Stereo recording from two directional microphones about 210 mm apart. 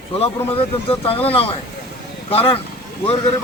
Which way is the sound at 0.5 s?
25° left (ahead or behind).